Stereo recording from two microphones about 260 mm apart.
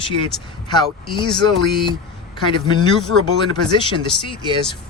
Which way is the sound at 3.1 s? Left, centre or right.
Right.